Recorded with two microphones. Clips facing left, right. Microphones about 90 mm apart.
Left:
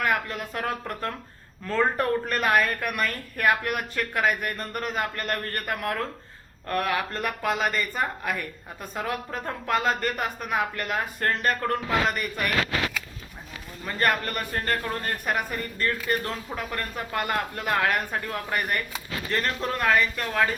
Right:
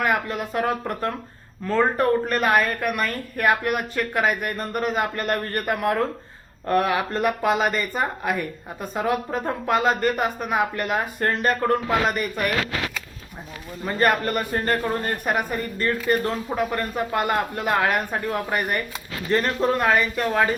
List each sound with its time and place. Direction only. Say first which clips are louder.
0.0 s speech: right 3 dB; 10° right (ahead or behind)
13.8 s speech: right 4 dB; 15° right (ahead or behind)